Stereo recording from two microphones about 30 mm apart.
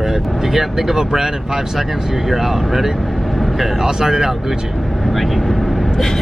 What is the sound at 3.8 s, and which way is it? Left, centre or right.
Speech, centre.